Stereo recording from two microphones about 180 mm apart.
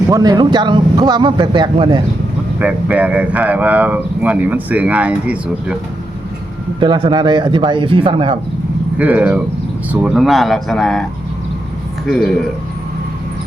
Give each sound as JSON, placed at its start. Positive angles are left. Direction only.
{"t": 0.1, "sound": "speech", "side_deg": -20}
{"t": 2.6, "sound": "speech", "side_deg": -10}
{"t": 6.7, "sound": "speech", "side_deg": -25}
{"t": 9.0, "sound": "speech", "side_deg": -10}
{"t": 12.0, "sound": "speech", "side_deg": 0}